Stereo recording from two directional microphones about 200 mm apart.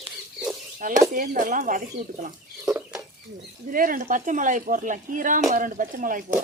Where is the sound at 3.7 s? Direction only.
45° right (ahead or behind).